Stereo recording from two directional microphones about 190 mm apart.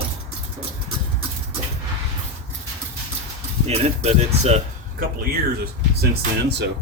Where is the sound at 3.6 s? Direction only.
35° right (ahead or behind).